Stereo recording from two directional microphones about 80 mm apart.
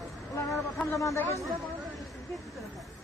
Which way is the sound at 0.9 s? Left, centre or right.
Left.